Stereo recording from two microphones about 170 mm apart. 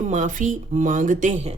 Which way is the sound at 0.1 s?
45° right (ahead or behind).